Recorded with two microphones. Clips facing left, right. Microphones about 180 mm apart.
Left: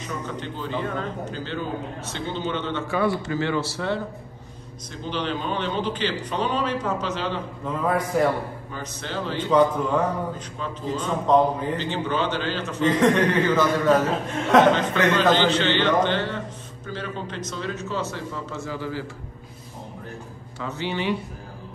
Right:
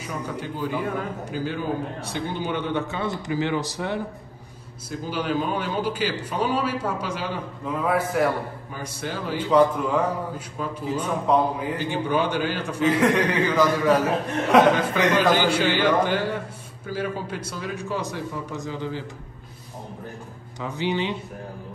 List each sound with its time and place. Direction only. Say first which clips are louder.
0.0 s a man's voice: right 1 dB; 10° right (ahead or behind)
5.0 s a man's voice: right 2 dB; 5° right (ahead or behind)
20.6 s a man's voice: right 1 dB; 15° right (ahead or behind)